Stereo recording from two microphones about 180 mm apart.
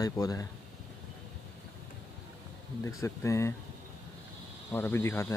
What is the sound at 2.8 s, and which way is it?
Speech, 15° left (ahead or behind).